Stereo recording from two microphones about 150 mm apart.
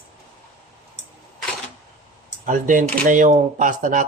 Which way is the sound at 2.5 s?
60° right (ahead or behind).